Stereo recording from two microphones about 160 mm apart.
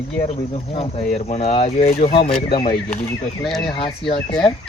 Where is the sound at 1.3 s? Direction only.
40° left (ahead or behind).